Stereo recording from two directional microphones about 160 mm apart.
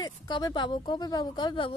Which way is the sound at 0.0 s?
25° left (ahead or behind).